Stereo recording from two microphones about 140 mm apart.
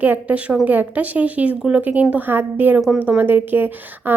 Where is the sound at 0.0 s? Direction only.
10° right (ahead or behind).